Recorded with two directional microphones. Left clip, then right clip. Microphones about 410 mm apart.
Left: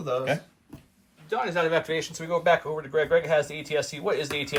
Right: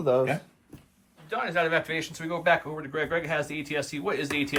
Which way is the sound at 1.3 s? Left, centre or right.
Centre.